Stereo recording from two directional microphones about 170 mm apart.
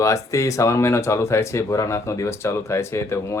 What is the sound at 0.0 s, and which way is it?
Speech, 20° left (ahead or behind).